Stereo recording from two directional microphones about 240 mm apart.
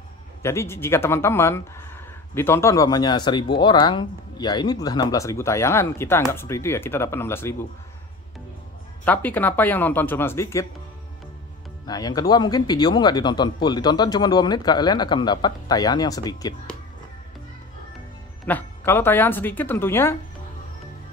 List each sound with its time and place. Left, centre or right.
0.4 s speech: centre
9.0 s speech: centre
11.8 s speech: centre
18.4 s speech: centre